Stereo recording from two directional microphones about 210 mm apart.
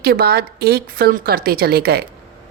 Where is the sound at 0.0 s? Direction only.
45° right (ahead or behind).